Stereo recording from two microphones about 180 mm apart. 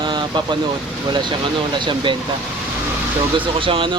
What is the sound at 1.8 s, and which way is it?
Speech, 25° right (ahead or behind).